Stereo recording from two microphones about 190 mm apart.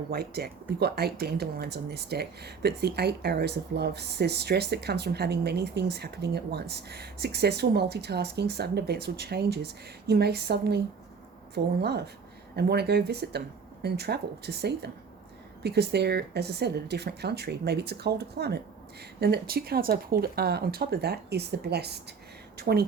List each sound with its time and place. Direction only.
0.1 s speech: 55° right (ahead or behind)